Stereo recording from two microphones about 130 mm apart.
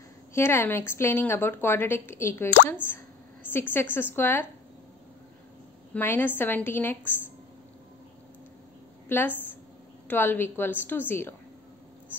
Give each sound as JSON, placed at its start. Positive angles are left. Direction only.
{"t": 0.3, "sound": "a woman's voice", "side_deg": 20}
{"t": 5.9, "sound": "a woman's voice", "side_deg": 15}
{"t": 9.1, "sound": "a woman's voice", "side_deg": 15}